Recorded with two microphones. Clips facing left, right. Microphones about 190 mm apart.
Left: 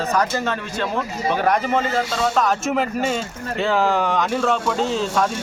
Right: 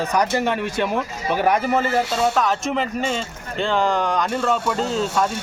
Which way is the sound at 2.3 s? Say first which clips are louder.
Left 1 dB; centre (ahead or behind).